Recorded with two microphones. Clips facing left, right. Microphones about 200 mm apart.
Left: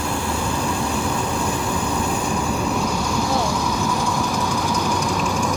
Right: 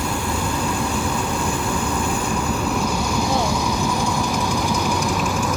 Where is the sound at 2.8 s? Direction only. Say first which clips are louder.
Even; 5° right (ahead or behind).